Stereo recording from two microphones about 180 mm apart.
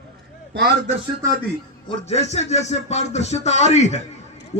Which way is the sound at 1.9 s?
40° left (ahead or behind).